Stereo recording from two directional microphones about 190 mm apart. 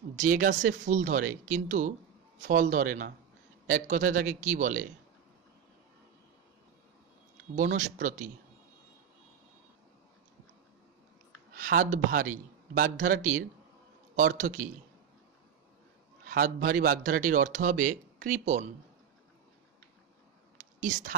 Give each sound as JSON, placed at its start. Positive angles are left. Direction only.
{"t": 0.1, "sound": "speech", "side_deg": -40}
{"t": 7.5, "sound": "speech", "side_deg": -40}
{"t": 11.5, "sound": "speech", "side_deg": -45}
{"t": 16.3, "sound": "speech", "side_deg": -45}